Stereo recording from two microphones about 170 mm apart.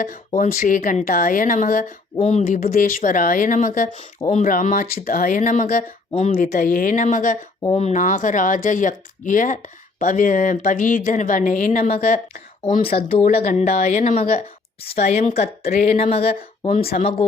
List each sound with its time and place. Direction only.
0.3 s speech: 55° left (ahead or behind)
2.1 s speech: 40° left (ahead or behind)
14.8 s speech: 35° left (ahead or behind)